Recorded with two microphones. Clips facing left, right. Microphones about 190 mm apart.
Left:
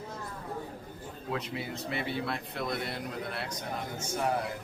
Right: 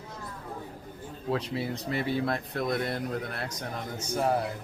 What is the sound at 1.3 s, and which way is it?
A man's voice, 35° right (ahead or behind).